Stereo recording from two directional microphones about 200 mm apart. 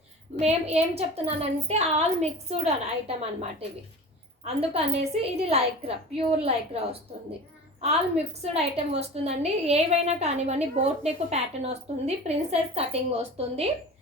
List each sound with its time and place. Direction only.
0.3 s a woman's voice: 30° right (ahead or behind)
4.4 s a woman's voice: 30° right (ahead or behind)